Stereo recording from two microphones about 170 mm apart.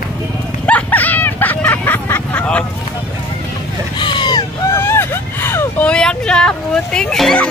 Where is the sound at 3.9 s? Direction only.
25° left (ahead or behind).